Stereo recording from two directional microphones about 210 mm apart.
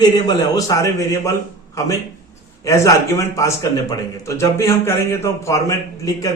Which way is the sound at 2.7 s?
15° left (ahead or behind).